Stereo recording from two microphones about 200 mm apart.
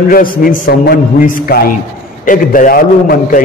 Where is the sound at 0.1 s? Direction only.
45° left (ahead or behind).